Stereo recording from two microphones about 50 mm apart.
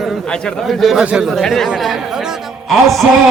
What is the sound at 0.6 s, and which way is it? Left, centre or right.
Speech, centre.